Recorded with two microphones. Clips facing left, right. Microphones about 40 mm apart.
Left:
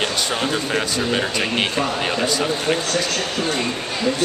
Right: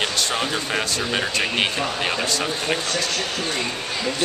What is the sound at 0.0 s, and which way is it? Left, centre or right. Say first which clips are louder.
Speech: left 1 dB; centre.